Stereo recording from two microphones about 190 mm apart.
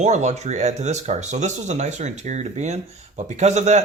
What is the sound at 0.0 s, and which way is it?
Speech, 35° right (ahead or behind).